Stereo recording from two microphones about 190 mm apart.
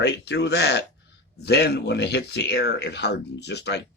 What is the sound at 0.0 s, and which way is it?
Speech, 65° left (ahead or behind).